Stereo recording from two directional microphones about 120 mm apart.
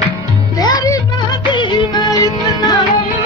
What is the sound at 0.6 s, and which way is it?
Music, 30° left (ahead or behind).